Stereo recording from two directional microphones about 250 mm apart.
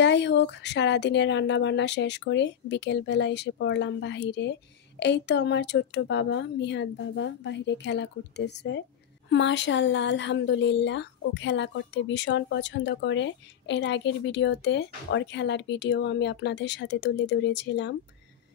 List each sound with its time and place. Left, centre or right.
0.0 s speech: left